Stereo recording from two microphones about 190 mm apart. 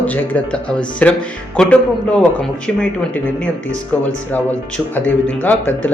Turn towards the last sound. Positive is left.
turn(degrees=10)  # may be behind; listen again after turning